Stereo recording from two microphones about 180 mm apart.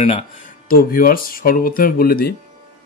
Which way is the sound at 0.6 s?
50° left (ahead or behind).